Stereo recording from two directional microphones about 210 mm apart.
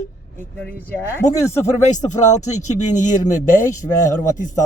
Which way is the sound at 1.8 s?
35° left (ahead or behind).